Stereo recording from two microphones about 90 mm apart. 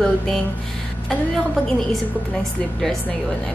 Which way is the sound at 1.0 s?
Centre (ahead or behind).